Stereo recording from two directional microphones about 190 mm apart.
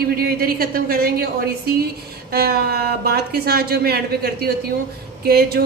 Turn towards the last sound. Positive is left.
turn(degrees=-55)  # may be behind; listen again after turning